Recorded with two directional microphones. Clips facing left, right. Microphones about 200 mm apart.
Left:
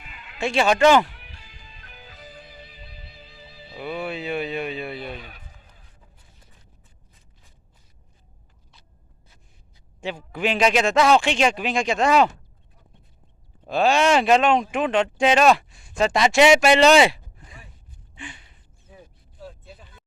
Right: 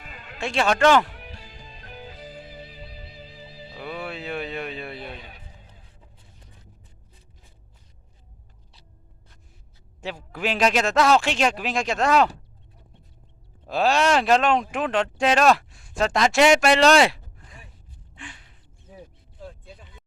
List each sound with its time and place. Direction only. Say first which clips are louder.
0.0 s music: right 4 dB; 40° right (ahead or behind)
0.3 s speech: left 3 dB; centre (ahead or behind)
1.1 s music: right 7 dB; 40° right (ahead or behind)
3.8 s speech: left 4 dB; centre (ahead or behind)
5.2 s music: left 1 dB; 25° right (ahead or behind)
10.0 s speech: left 3 dB; centre (ahead or behind)
13.7 s speech: left 2 dB; centre (ahead or behind)
18.1 s a sound: left 3 dB; centre (ahead or behind)
19.5 s vehicle: even; 5° left (ahead or behind)